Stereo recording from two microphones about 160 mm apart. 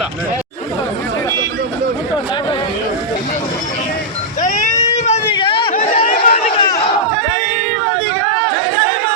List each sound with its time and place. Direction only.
4.4 s vehicle: 50° left (ahead or behind)
5.3 s a sound: 30° left (ahead or behind)
5.7 s chatter: 55° left (ahead or behind)
6.1 s run: 60° left (ahead or behind)
6.4 s crowd: 30° left (ahead or behind)